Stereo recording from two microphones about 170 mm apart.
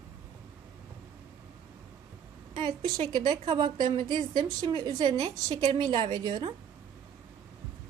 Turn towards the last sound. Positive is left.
turn(degrees=-20)  # may be behind; listen again after turning